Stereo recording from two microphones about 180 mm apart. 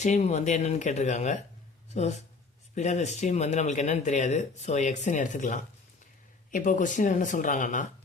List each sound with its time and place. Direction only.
0.0 s speech: 40° left (ahead or behind)